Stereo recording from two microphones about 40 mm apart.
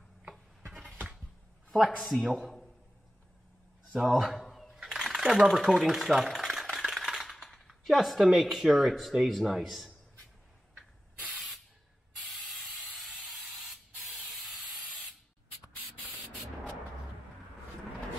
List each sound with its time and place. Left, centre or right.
2.0 s speech: centre
3.9 s speech: centre
4.4 s a sound: centre
4.7 s a sound: centre
5.3 s speech: centre
11.3 s spray: centre
14.0 s steam: centre